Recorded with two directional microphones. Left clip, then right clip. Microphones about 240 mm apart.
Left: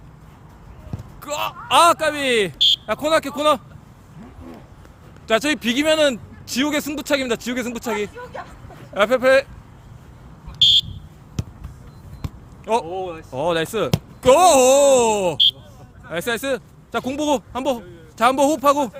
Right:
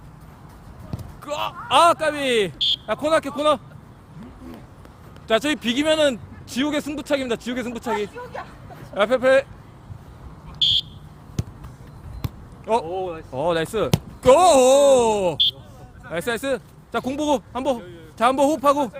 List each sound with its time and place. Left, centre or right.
1.2 s speech: centre
2.6 s a sound: left
2.8 s speech: left
5.3 s speech: left
10.6 s a sound: left
11.4 s basketball bounce: left
12.2 s a sound: centre
12.8 s speech: left
13.3 s speech: centre